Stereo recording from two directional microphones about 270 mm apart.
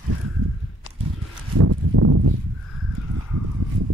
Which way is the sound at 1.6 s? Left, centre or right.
Right.